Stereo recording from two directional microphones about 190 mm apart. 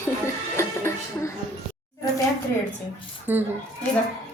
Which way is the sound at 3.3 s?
10° right (ahead or behind).